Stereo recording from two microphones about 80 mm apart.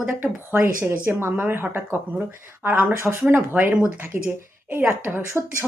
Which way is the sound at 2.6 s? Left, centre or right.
Centre.